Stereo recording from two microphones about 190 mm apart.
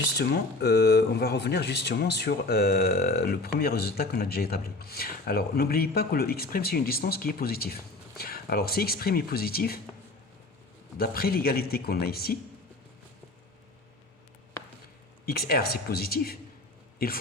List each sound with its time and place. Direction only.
0.2 s speech: 60° left (ahead or behind)
10.9 s speech: 50° left (ahead or behind)
15.3 s speech: 50° left (ahead or behind)